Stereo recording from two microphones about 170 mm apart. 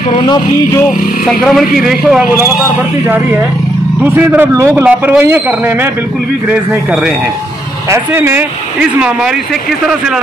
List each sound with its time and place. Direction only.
0.1 s a sound: 25° left (ahead or behind)
1.2 s a man's voice: centre (ahead or behind)
4.0 s a man's voice: 10° right (ahead or behind)